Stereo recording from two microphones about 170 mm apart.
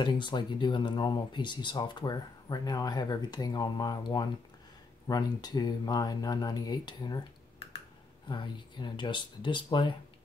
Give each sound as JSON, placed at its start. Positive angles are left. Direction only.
{"t": 0.0, "sound": "speech", "side_deg": 25}